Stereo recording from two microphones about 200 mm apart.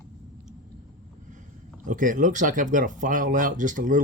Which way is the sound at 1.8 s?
40° right (ahead or behind).